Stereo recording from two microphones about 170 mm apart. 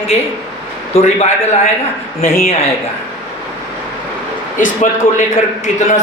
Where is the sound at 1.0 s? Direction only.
40° left (ahead or behind).